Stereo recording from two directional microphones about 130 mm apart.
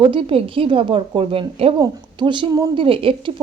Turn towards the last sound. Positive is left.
turn(degrees=-45)  # may be behind; listen again after turning